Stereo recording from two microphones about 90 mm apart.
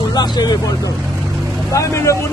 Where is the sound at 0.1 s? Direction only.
50° left (ahead or behind).